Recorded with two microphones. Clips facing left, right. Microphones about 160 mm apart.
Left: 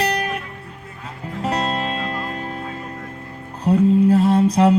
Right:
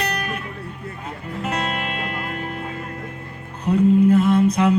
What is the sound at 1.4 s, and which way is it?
Music, 35° left (ahead or behind).